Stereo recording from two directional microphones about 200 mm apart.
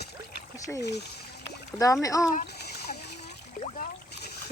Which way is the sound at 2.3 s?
50° left (ahead or behind).